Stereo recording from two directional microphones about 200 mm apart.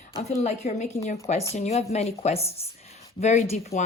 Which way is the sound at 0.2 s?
35° left (ahead or behind).